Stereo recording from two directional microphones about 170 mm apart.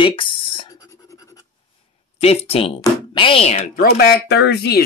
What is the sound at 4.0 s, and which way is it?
Speech, 75° left (ahead or behind).